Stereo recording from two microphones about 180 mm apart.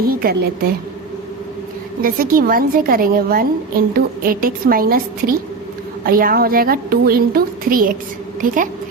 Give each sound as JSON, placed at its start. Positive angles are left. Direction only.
{"t": 0.1, "sound": "a woman's voice", "side_deg": -55}
{"t": 2.0, "sound": "a woman's voice", "side_deg": -55}